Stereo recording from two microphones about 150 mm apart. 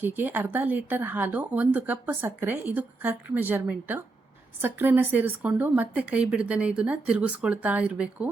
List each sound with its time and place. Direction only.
0.0 s speech: 10° right (ahead or behind)